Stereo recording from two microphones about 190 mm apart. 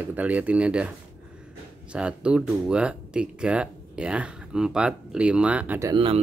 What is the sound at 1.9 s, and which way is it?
Speech, 5° right (ahead or behind).